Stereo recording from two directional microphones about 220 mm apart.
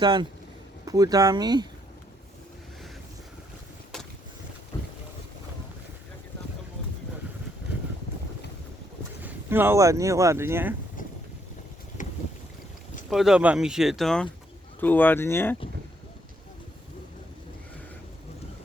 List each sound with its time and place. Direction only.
0.0 s speech: 20° right (ahead or behind)
4.7 s boat: 20° left (ahead or behind)
9.2 s speech: 10° right (ahead or behind)
12.0 s boat: 35° left (ahead or behind)
13.1 s speech: centre (ahead or behind)